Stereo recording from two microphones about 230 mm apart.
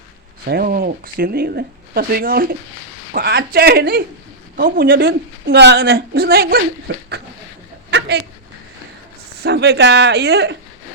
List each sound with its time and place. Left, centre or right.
0.4 s a woman's voice: right
7.9 s a sound: right
9.4 s a woman's voice: right